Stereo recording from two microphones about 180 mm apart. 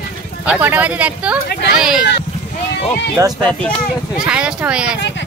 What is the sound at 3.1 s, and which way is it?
Speech, 20° right (ahead or behind).